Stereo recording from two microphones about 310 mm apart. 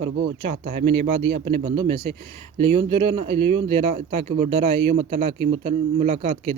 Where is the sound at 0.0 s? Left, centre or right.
Right.